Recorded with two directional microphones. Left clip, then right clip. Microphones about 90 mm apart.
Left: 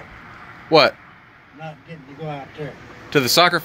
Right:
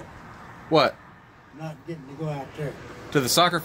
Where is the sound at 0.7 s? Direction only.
90° left.